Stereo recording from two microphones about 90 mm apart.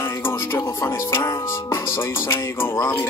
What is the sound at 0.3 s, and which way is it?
Speech, 30° left (ahead or behind).